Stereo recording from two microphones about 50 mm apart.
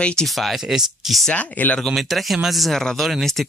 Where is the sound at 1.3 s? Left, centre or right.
Left.